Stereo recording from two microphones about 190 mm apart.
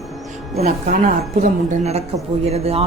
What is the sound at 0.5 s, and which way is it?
Speech, 40° right (ahead or behind).